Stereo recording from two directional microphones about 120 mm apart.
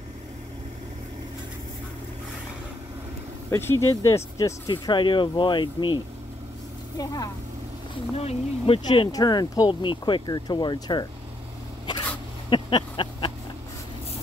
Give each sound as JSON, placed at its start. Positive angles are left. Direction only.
{"t": 3.4, "sound": "speech", "side_deg": 20}
{"t": 7.0, "sound": "speech", "side_deg": 30}
{"t": 8.2, "sound": "speech", "side_deg": 55}
{"t": 8.8, "sound": "speech", "side_deg": 45}
{"t": 12.4, "sound": "a sound", "side_deg": 40}